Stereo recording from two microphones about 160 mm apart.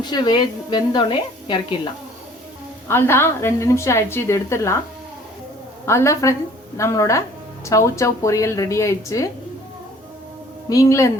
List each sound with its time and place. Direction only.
0.0 s a woman's voice: 25° left (ahead or behind)
2.9 s a woman's voice: 15° left (ahead or behind)
5.8 s a woman's voice: 15° left (ahead or behind)
10.7 s a woman's voice: 20° left (ahead or behind)